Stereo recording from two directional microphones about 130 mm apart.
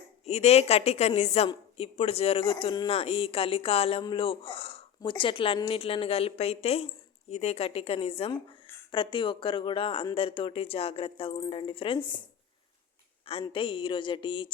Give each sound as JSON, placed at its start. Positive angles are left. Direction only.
{"t": 0.3, "sound": "a woman's voice", "side_deg": 55}
{"t": 13.5, "sound": "speech", "side_deg": 40}